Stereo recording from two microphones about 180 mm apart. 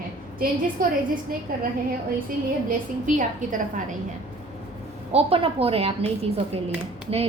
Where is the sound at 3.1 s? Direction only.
45° right (ahead or behind).